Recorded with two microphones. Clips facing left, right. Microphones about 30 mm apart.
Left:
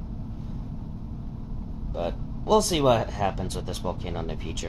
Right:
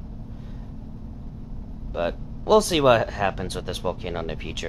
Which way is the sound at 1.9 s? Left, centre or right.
Right.